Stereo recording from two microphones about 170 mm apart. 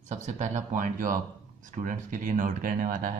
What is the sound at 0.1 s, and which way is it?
Speech, 45° right (ahead or behind).